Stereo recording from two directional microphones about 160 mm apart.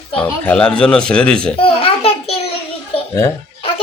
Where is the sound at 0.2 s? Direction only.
5° left (ahead or behind).